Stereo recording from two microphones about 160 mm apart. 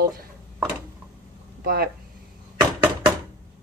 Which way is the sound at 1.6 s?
75° right (ahead or behind).